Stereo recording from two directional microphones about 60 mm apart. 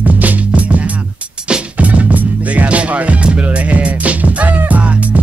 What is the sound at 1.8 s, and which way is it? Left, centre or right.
Music, right.